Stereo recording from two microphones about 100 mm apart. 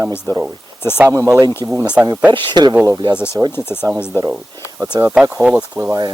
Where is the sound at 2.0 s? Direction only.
10° right (ahead or behind).